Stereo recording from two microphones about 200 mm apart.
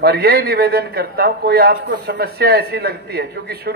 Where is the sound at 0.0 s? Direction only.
50° right (ahead or behind).